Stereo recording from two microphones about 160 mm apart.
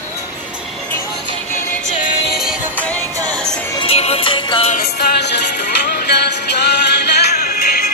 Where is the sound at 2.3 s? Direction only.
Centre (ahead or behind).